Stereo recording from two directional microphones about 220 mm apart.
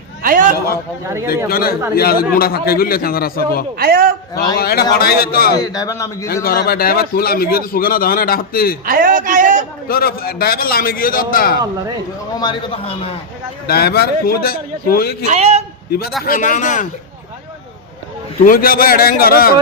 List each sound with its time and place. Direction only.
0.2 s a sound: 40° right (ahead or behind)
1.5 s a man's voice: 45° left (ahead or behind)
3.8 s a man's voice: 45° right (ahead or behind)
4.5 s a man's voice: 45° left (ahead or behind)
5.5 s a man's voice: 15° left (ahead or behind)
6.2 s a man's voice: 45° left (ahead or behind)
8.9 s a man's voice: 40° right (ahead or behind)
9.9 s a man's voice: 45° left (ahead or behind)
12.3 s a man's voice: 20° left (ahead or behind)
13.7 s a man's voice: 45° left (ahead or behind)
15.3 s a man's voice: 30° right (ahead or behind)
16.2 s a man's voice: 40° left (ahead or behind)
18.4 s a man's voice: 40° left (ahead or behind)